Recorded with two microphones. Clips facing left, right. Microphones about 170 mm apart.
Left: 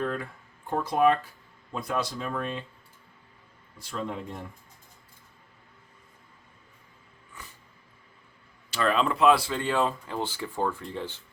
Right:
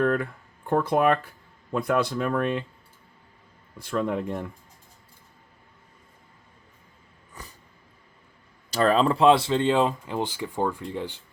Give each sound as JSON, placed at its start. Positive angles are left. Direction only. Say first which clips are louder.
{"t": 0.0, "sound": "speech", "louder": "right 7 dB", "side_deg": -60}
{"t": 3.8, "sound": "speech", "louder": "right 7 dB", "side_deg": -60}
{"t": 7.4, "sound": "a sound", "louder": "right 3 dB", "side_deg": -40}
{"t": 8.7, "sound": "speech", "louder": "right 5 dB", "side_deg": -40}